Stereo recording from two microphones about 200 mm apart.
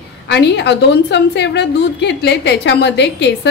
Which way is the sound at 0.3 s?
60° left (ahead or behind).